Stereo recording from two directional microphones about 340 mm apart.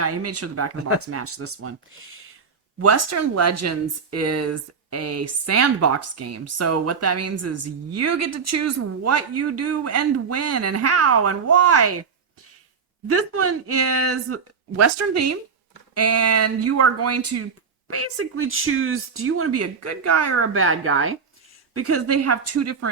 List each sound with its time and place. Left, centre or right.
0.0 s speech: right
2.7 s speech: right
13.1 s speech: right